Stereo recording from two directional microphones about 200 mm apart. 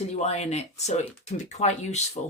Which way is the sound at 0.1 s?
35° left (ahead or behind).